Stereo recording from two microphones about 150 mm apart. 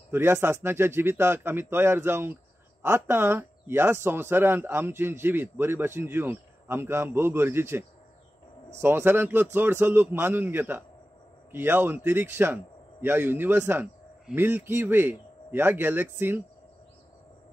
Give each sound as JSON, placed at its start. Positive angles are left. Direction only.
{"t": 0.1, "sound": "speech", "side_deg": -15}
{"t": 8.8, "sound": "speech", "side_deg": -15}